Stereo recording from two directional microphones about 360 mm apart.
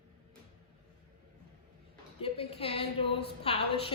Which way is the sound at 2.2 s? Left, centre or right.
Centre.